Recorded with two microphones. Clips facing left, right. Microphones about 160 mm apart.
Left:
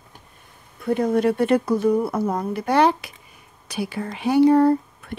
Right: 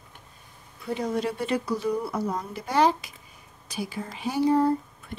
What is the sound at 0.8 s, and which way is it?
Speech, 55° left (ahead or behind).